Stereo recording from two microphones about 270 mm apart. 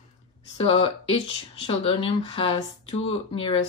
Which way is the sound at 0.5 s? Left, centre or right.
Left.